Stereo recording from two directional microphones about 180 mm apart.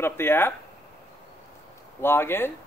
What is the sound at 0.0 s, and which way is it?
Speech, 10° left (ahead or behind).